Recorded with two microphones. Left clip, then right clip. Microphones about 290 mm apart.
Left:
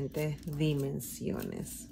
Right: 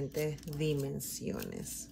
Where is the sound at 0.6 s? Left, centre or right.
Centre.